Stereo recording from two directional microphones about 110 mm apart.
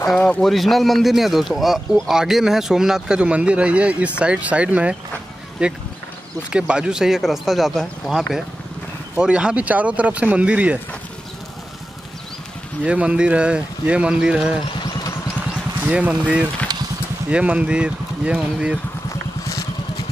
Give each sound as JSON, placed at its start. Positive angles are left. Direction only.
{"t": 0.1, "sound": "speech", "side_deg": 5}
{"t": 12.8, "sound": "speech", "side_deg": -10}
{"t": 14.6, "sound": "speech", "side_deg": 50}
{"t": 15.8, "sound": "speech", "side_deg": -10}
{"t": 16.7, "sound": "vehicle", "side_deg": -40}
{"t": 17.3, "sound": "speech", "side_deg": -10}